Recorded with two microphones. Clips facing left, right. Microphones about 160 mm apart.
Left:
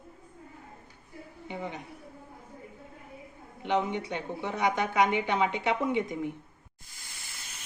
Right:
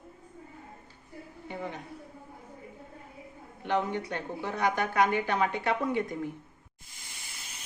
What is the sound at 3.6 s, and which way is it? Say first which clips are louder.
Speech: left 1 dB; 20° left (ahead or behind).